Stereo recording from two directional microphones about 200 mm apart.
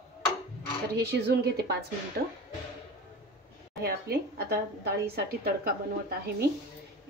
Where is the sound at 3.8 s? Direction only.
50° right (ahead or behind).